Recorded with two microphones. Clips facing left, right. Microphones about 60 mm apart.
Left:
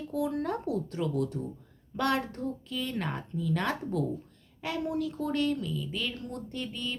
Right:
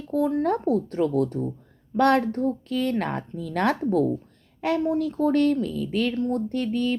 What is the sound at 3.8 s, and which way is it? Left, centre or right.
Speech, right.